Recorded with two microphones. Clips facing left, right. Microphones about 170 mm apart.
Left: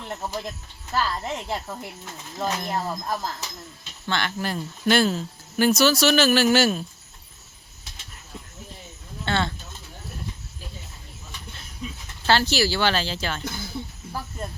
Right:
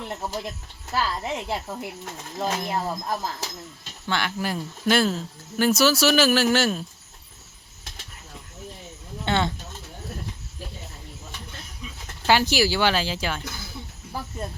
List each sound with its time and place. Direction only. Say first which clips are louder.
0.9 s speech: even; 10° right (ahead or behind)
9.2 s speech: right 1 dB; 15° right (ahead or behind)
12.2 s speech: right 1 dB; 15° right (ahead or behind)